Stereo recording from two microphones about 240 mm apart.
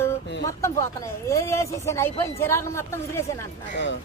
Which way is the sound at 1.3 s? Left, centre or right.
Centre.